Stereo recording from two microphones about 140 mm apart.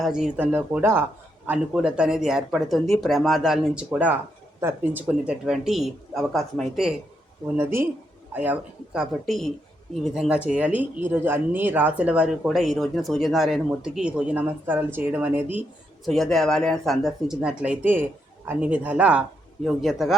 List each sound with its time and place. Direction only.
0.0 s speech: 5° right (ahead or behind)
7.5 s speech: 15° right (ahead or behind)
16.0 s speech: centre (ahead or behind)